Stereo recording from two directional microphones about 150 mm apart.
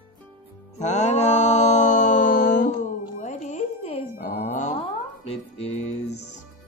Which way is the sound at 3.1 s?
55° left (ahead or behind).